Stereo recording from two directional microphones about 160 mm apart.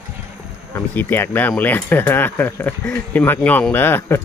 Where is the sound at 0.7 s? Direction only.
15° left (ahead or behind).